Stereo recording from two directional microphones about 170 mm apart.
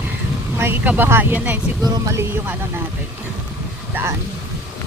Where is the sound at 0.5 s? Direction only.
10° right (ahead or behind).